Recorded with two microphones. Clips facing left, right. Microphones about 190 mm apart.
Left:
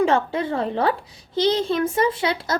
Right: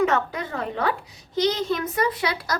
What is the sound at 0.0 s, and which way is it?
A woman's voice, 30° left (ahead or behind).